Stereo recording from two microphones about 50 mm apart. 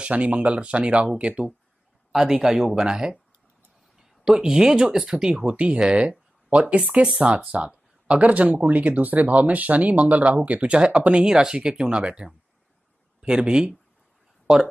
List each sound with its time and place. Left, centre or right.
0.0 s speech: right
2.1 s speech: centre